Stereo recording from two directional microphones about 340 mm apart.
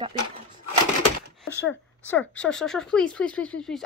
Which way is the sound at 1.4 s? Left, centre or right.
Centre.